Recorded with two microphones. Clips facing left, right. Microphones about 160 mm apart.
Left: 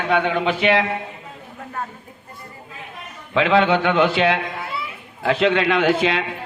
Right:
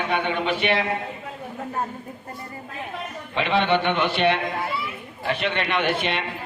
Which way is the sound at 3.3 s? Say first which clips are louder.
Left 5 dB; 90° left.